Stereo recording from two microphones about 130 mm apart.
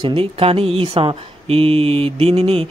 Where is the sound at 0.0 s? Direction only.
45° right (ahead or behind).